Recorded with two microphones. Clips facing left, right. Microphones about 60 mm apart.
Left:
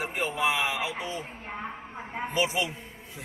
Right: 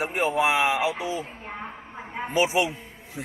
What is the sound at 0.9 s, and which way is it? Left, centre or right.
Speech, left.